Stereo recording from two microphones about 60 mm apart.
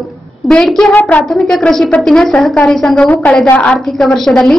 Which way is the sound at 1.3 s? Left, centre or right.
Centre.